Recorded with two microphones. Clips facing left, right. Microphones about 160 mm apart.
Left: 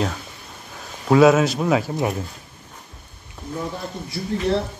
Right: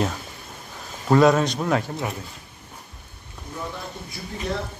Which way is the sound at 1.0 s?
5° left (ahead or behind).